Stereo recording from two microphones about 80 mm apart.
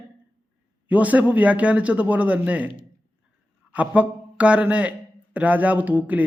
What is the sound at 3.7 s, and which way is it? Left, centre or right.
A man's voice, centre.